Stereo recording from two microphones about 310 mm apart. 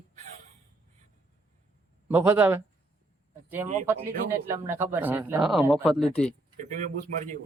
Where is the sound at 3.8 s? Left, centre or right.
Centre.